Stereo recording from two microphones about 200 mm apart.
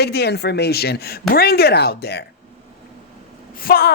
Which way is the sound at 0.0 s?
55° left (ahead or behind).